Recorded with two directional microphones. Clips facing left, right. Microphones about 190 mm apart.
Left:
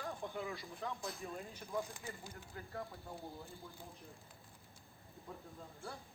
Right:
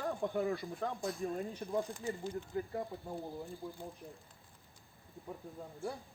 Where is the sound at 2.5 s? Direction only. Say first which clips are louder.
Right 13 dB; 20° right (ahead or behind).